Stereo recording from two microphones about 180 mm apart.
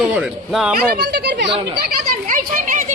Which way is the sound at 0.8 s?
60° right (ahead or behind).